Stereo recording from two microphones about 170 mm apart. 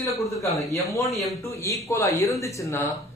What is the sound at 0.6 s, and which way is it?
A man's voice, 20° left (ahead or behind).